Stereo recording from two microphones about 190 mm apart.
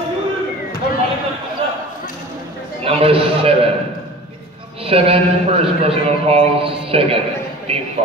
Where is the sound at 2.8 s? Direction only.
30° right (ahead or behind).